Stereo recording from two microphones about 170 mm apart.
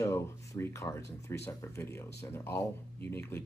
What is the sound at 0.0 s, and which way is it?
Speech, 15° left (ahead or behind).